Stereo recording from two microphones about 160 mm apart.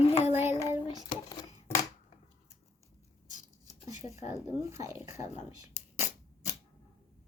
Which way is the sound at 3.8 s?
20° right (ahead or behind).